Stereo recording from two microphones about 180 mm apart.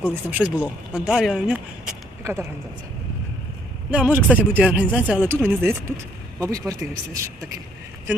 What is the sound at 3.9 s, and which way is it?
Speech, 5° right (ahead or behind).